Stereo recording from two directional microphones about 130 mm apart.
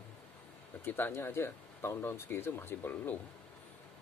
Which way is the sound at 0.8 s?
15° left (ahead or behind).